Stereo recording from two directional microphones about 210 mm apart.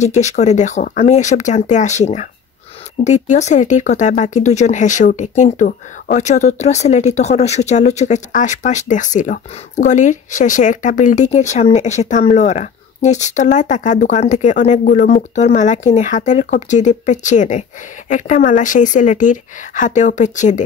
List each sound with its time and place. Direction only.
0.0 s speech: 35° left (ahead or behind)